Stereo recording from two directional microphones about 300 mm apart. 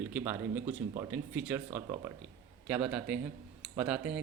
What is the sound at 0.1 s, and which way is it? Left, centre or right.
Speech, centre.